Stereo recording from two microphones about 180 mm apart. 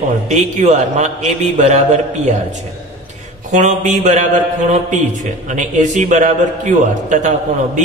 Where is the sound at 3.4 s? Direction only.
45° right (ahead or behind).